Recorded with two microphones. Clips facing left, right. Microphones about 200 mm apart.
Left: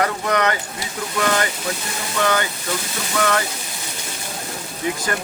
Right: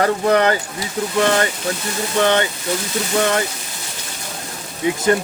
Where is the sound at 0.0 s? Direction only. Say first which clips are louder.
Right 5 dB; 30° right (ahead or behind).